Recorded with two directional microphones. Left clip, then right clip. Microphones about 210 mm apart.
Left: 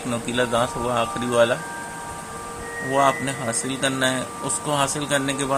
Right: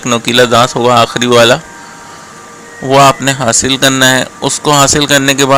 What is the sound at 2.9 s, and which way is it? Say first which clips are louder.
Speech: right 14 dB; 40° right (ahead or behind).